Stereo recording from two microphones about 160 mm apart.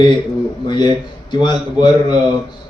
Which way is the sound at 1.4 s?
30° left (ahead or behind).